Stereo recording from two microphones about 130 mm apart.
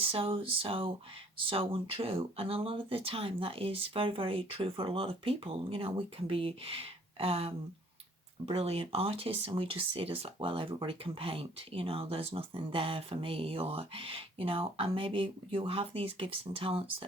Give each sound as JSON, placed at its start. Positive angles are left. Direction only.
{"t": 0.0, "sound": "speech", "side_deg": -45}